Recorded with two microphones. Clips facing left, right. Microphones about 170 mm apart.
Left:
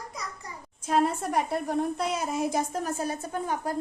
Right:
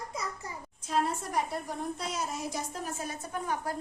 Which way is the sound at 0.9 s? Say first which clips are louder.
Left 6 dB; 65° left (ahead or behind).